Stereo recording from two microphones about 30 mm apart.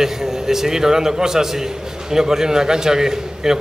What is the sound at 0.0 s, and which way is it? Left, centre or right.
A man's voice, centre.